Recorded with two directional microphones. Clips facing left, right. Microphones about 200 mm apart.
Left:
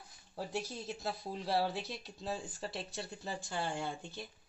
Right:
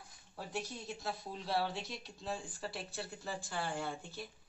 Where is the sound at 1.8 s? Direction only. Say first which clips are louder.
Left 2 dB; centre (ahead or behind).